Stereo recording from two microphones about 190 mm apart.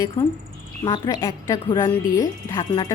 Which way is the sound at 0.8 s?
25° left (ahead or behind).